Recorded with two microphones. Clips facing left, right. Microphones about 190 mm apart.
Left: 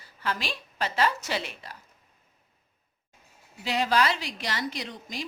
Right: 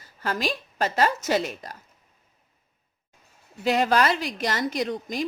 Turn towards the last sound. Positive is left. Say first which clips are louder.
# right 9 dB
turn(degrees=-50)  # may be behind; listen again after turning